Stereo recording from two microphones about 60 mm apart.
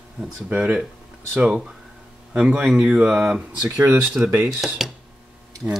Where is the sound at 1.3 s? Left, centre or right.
Centre.